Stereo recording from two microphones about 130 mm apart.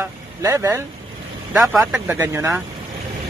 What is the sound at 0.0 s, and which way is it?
Speech, 20° right (ahead or behind).